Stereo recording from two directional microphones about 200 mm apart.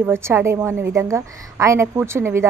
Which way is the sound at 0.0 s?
10° right (ahead or behind).